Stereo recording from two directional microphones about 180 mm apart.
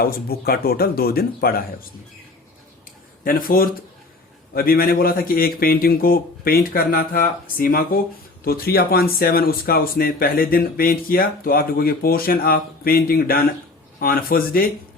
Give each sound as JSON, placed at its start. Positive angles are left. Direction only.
{"t": 0.0, "sound": "speech", "side_deg": 55}
{"t": 3.2, "sound": "speech", "side_deg": 55}